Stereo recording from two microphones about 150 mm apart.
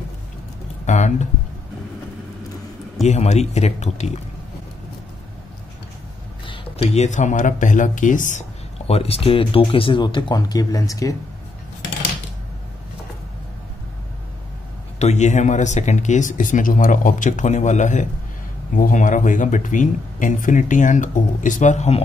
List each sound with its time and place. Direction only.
0.8 s speech: 50° left (ahead or behind)
3.0 s speech: 50° left (ahead or behind)
6.4 s a sound: 35° left (ahead or behind)
7.0 s speech: 55° left (ahead or behind); by 11.1 s 25° left (ahead or behind)
15.0 s speech: 50° left (ahead or behind)